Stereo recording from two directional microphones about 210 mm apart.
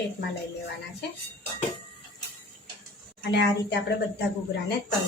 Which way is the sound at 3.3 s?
55° left (ahead or behind).